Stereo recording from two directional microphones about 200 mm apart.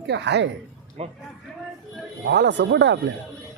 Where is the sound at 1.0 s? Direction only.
30° right (ahead or behind).